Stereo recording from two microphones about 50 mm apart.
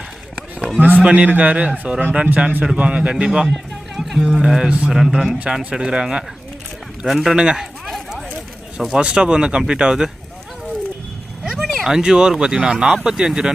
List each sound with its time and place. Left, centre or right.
0.8 s a man's voice: right; by 3.5 s centre
3.9 s music: centre
4.4 s speech: centre
7.1 s speech: centre
7.3 s speech: centre
7.6 s a sound: centre
9.0 s speech: centre
11.5 s a sound: centre
11.9 s speech: centre